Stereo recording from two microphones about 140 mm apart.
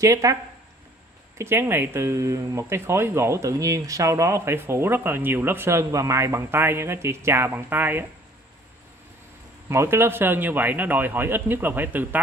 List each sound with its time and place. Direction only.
0.0 s speech: 20° right (ahead or behind)
1.4 s speech: 15° right (ahead or behind)
9.7 s a man's voice: 20° right (ahead or behind)